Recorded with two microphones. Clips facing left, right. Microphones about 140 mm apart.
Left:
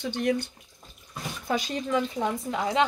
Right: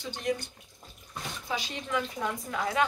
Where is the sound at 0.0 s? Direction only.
60° left (ahead or behind).